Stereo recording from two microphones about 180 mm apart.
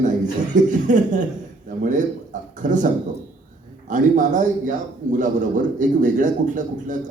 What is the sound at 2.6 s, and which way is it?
Speech, 45° right (ahead or behind).